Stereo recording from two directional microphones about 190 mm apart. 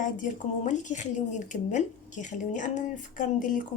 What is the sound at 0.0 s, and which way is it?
A woman's voice, 40° left (ahead or behind).